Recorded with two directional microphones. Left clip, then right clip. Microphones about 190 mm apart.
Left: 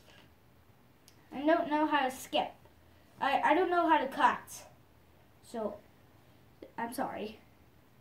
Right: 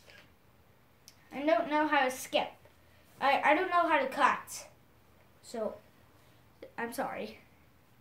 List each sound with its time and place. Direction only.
1.0 s a woman's voice: 25° right (ahead or behind)
6.6 s a woman's voice: 20° right (ahead or behind)